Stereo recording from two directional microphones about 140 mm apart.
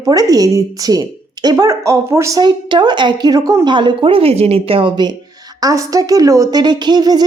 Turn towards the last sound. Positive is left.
turn(degrees=-30)  # may be behind; listen again after turning